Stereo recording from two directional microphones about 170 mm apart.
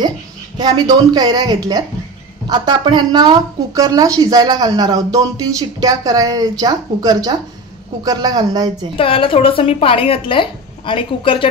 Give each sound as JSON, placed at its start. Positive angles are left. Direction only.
{"t": 0.6, "sound": "a woman's voice", "side_deg": -25}
{"t": 8.9, "sound": "speech", "side_deg": 30}